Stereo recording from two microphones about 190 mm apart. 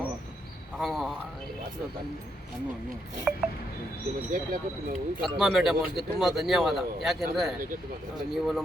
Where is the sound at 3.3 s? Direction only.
Centre (ahead or behind).